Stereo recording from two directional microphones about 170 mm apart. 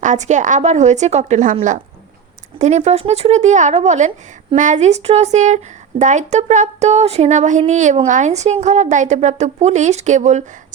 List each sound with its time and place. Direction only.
0.0 s speech: 45° right (ahead or behind)
2.6 s speech: 45° right (ahead or behind)